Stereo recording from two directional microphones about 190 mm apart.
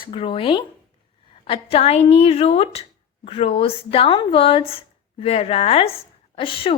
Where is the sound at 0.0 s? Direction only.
25° left (ahead or behind).